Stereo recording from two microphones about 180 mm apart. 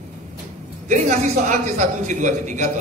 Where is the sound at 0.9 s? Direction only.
45° right (ahead or behind).